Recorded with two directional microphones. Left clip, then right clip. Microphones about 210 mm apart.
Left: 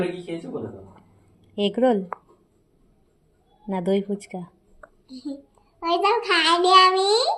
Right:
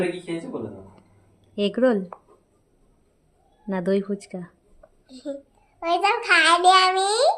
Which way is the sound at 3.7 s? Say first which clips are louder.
Even; 10° right (ahead or behind).